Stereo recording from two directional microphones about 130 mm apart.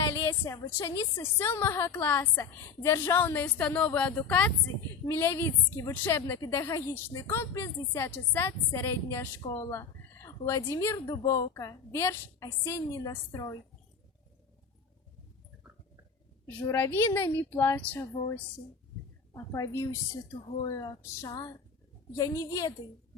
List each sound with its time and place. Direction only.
0.1 s a woman's voice: 20° left (ahead or behind)
16.6 s a woman's voice: 20° left (ahead or behind)
19.3 s a woman's voice: 30° left (ahead or behind)